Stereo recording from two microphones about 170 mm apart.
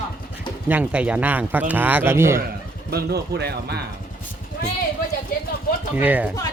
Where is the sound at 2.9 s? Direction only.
70° right (ahead or behind).